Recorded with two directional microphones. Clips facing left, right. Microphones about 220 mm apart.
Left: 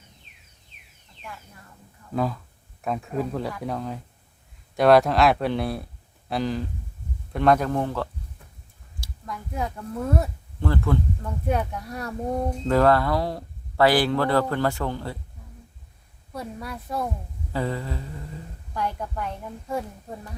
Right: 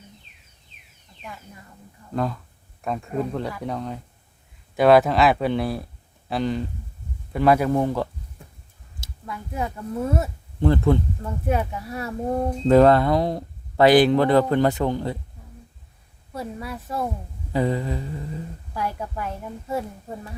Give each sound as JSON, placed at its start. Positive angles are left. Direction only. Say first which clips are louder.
{"t": 2.1, "sound": "speech", "louder": "even", "side_deg": 0}
{"t": 9.2, "sound": "speech", "louder": "right 1 dB", "side_deg": -5}
{"t": 10.6, "sound": "speech", "louder": "right 6 dB", "side_deg": -20}
{"t": 11.2, "sound": "speech", "louder": "right 2 dB", "side_deg": -5}
{"t": 12.6, "sound": "speech", "louder": "right 5 dB", "side_deg": -20}
{"t": 16.3, "sound": "speech", "louder": "right 2 dB", "side_deg": 0}
{"t": 17.5, "sound": "speech", "louder": "right 5 dB", "side_deg": -15}
{"t": 18.7, "sound": "speech", "louder": "even", "side_deg": -5}